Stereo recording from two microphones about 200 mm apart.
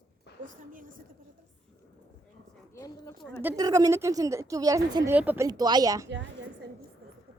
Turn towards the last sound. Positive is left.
turn(degrees=-15)  # may be behind; listen again after turning